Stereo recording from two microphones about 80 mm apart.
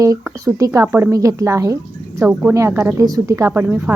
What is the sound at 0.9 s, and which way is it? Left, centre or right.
Speech, right.